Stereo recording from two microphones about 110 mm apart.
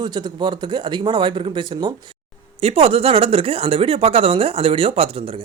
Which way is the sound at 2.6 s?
70° right (ahead or behind).